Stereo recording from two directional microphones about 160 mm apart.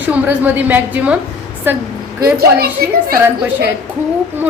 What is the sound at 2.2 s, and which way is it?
Speech, 70° right (ahead or behind).